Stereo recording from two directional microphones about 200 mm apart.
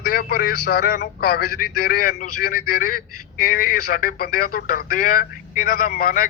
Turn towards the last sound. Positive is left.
turn(degrees=45)  # may be behind; listen again after turning